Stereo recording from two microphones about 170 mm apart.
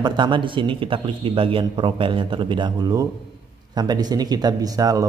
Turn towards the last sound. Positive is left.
turn(degrees=-20)  # may be behind; listen again after turning